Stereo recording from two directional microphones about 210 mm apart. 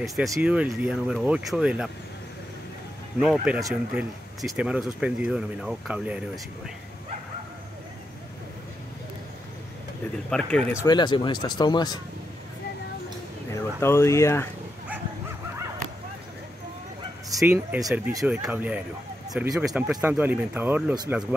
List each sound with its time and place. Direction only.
0.0 s speech: centre (ahead or behind)
3.2 s speech: 5° right (ahead or behind)
10.3 s speech: 5° left (ahead or behind); by 12.0 s 20° left (ahead or behind)
13.5 s speech: 10° left (ahead or behind)
17.3 s speech: 10° right (ahead or behind)